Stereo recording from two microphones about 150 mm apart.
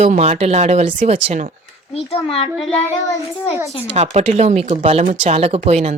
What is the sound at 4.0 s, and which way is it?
Speech, 45° right (ahead or behind).